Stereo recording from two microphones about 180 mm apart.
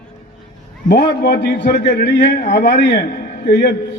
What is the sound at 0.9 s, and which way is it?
A man's voice, 65° left (ahead or behind).